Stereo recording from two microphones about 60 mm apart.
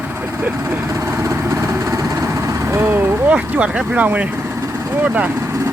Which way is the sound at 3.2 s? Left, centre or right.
Centre.